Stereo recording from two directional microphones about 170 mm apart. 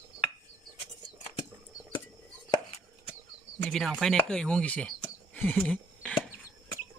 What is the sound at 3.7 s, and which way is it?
Speech, centre (ahead or behind).